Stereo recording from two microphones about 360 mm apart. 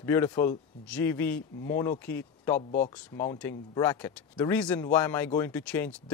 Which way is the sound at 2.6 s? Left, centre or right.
Centre.